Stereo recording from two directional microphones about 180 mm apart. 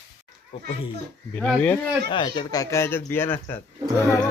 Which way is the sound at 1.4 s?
5° left (ahead or behind).